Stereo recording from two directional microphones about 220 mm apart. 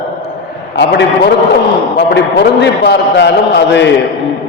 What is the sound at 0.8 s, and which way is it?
Speech, 50° left (ahead or behind).